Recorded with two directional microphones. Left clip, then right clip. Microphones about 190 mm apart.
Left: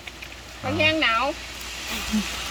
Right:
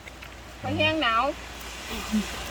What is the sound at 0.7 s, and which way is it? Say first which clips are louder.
Speech: left 3 dB; 10° right (ahead or behind).